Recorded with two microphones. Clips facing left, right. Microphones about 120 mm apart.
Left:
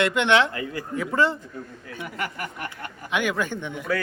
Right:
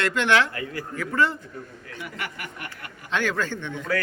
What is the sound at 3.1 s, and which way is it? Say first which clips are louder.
Speech: left 1 dB; 15° left (ahead or behind).